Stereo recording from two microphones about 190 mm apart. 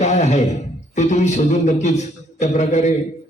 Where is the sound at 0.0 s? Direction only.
35° left (ahead or behind).